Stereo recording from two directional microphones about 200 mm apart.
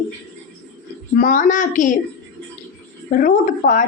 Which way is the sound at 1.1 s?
40° left (ahead or behind).